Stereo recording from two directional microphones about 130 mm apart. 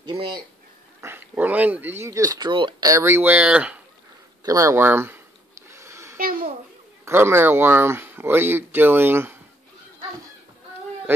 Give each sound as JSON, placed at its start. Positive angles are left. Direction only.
{"t": 0.0, "sound": "speech", "side_deg": -40}
{"t": 1.0, "sound": "speech", "side_deg": -15}
{"t": 2.5, "sound": "speech", "side_deg": -40}
{"t": 2.9, "sound": "speech", "side_deg": -20}
{"t": 4.5, "sound": "speech", "side_deg": -25}
{"t": 5.7, "sound": "a sound", "side_deg": -20}
{"t": 6.1, "sound": "a sound", "side_deg": -90}
{"t": 7.1, "sound": "speech", "side_deg": -20}